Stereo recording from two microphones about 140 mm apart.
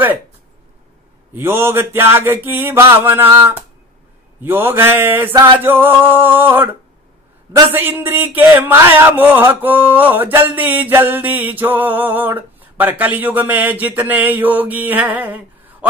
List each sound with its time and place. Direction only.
1.3 s speech: 15° right (ahead or behind)
7.7 s speech: 15° right (ahead or behind)